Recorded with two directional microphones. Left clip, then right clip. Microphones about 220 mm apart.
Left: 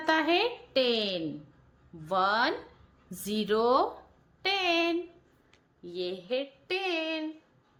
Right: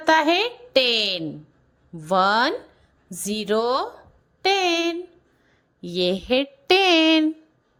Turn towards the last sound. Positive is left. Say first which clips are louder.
# right 15 dB
turn(degrees=-45)  # may be behind; listen again after turning